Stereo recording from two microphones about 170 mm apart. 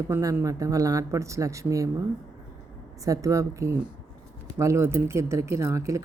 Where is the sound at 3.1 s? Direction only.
20° right (ahead or behind).